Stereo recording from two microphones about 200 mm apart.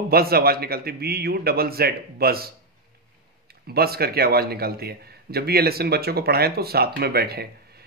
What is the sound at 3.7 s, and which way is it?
A man's voice, 50° right (ahead or behind).